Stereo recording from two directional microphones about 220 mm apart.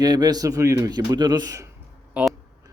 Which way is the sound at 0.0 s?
20° right (ahead or behind).